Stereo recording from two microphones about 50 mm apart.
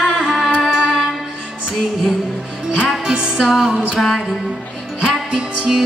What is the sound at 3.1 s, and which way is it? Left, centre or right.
Music, centre.